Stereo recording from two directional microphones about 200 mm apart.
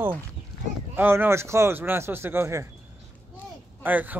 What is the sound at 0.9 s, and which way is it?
Speech, 10° right (ahead or behind).